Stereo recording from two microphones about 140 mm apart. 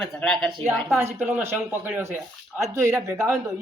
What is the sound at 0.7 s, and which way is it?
Speech, 10° right (ahead or behind).